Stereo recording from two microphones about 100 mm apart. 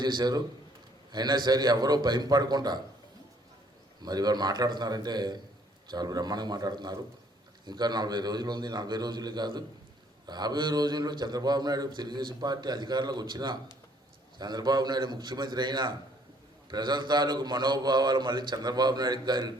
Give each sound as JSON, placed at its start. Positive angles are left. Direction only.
{"t": 0.0, "sound": "a man's voice", "side_deg": -45}
{"t": 4.0, "sound": "a man's voice", "side_deg": -40}